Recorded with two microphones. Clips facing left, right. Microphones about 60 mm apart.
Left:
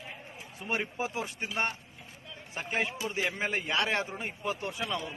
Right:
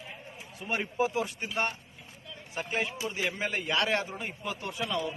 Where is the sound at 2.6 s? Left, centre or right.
Left.